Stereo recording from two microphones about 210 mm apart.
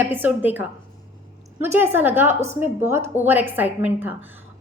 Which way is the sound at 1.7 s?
10° right (ahead or behind).